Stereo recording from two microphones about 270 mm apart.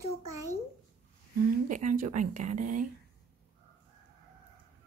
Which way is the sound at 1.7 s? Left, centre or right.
Right.